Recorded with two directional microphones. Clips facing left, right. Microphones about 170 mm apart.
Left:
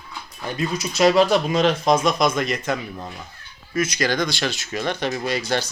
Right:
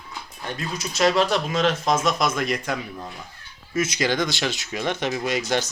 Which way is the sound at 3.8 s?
20° right (ahead or behind).